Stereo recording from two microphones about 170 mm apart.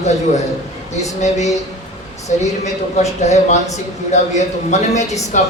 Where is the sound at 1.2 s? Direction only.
45° left (ahead or behind).